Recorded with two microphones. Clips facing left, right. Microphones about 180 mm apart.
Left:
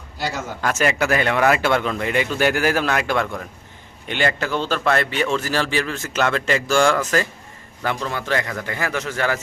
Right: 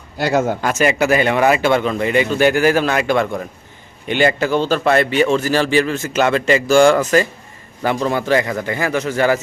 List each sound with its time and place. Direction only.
0.2 s speech: 60° right (ahead or behind)
0.6 s speech: 5° right (ahead or behind)
8.0 s a man's voice: 10° right (ahead or behind)